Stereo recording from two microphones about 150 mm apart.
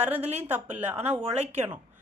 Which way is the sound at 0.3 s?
10° right (ahead or behind).